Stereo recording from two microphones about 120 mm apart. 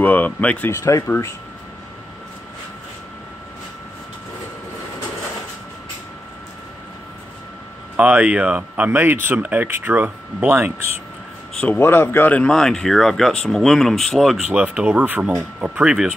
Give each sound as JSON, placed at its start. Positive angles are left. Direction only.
{"t": 0.0, "sound": "speech", "side_deg": 15}
{"t": 7.9, "sound": "speech", "side_deg": -10}
{"t": 11.6, "sound": "speech", "side_deg": 15}